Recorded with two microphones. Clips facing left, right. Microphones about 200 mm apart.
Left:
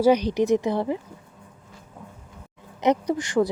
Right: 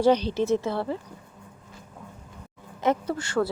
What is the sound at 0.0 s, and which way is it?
Speech, 10° left (ahead or behind).